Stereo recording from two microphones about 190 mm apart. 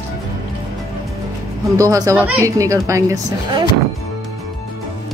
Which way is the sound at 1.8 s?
15° right (ahead or behind).